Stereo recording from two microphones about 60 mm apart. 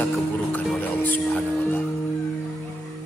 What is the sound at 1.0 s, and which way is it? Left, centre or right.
Music, left.